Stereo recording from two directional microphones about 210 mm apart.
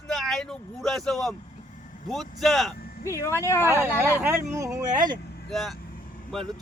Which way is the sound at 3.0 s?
15° left (ahead or behind).